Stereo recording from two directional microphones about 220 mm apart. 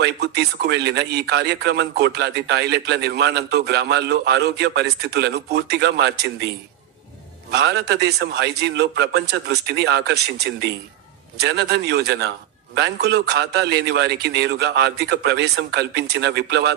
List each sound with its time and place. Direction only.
0.0 s a man's voice: 50° right (ahead or behind)
7.5 s a man's voice: 50° right (ahead or behind)